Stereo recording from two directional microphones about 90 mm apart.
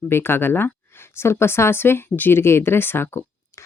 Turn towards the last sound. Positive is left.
turn(degrees=30)  # may be behind; listen again after turning